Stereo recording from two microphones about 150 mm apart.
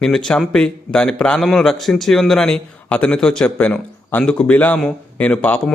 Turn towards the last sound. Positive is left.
turn(degrees=5)  # may be behind; listen again after turning